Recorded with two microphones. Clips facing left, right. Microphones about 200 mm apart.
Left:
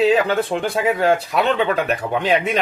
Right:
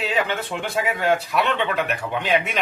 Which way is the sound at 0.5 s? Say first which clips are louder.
Left 7 dB; 40° left (ahead or behind).